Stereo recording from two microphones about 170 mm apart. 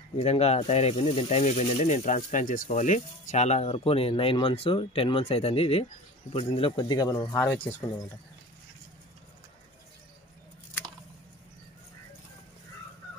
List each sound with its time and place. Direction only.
0.2 s speech: 40° left (ahead or behind)
6.8 s a man's voice: 20° left (ahead or behind)